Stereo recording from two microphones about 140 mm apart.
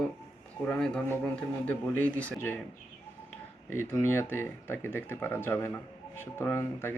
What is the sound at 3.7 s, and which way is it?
Speech, 15° left (ahead or behind).